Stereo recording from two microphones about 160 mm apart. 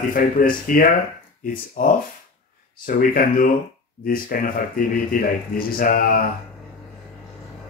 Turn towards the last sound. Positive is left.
turn(degrees=60)  # may be behind; listen again after turning